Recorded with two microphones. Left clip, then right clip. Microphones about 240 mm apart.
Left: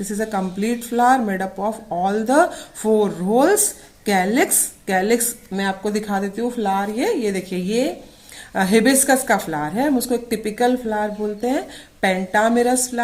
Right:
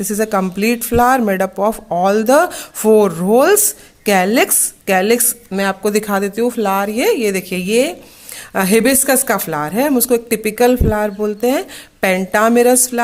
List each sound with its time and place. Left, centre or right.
0.1 s a woman's voice: right